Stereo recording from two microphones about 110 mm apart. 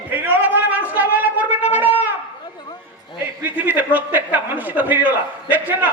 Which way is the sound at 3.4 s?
15° right (ahead or behind).